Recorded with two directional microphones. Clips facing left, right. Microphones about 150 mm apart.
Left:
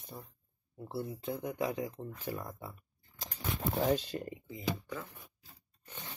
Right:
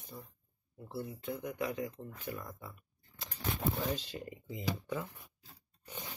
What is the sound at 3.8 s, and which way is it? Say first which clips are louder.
Speech: left 6 dB; 55° left (ahead or behind).